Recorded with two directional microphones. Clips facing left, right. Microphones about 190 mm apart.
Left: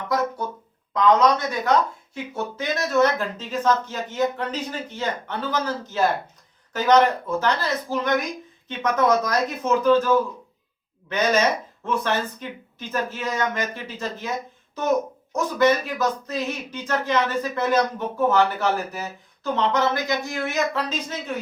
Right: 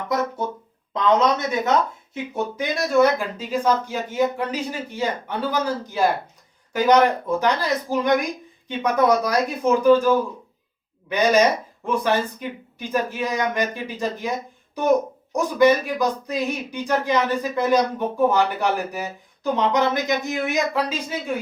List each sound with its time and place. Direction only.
0.9 s speech: 25° right (ahead or behind)
11.1 s speech: 15° right (ahead or behind)